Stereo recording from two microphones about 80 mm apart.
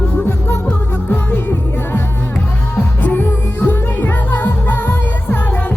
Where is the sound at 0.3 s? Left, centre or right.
Left.